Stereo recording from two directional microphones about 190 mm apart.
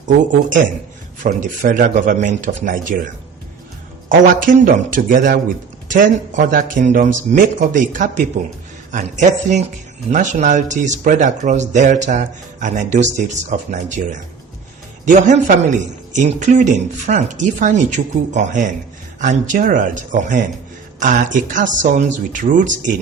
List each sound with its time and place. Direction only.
1.2 s speech: 40° right (ahead or behind)
4.1 s speech: 45° right (ahead or behind)